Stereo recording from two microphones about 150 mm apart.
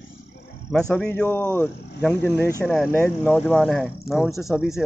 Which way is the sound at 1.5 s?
10° left (ahead or behind).